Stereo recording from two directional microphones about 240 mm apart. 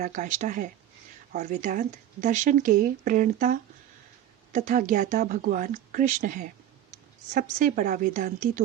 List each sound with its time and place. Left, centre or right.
0.0 s speech: right